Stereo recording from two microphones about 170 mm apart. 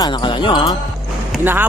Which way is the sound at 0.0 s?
25° left (ahead or behind).